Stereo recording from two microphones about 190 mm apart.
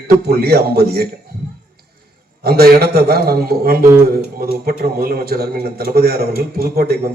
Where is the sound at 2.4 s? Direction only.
55° right (ahead or behind).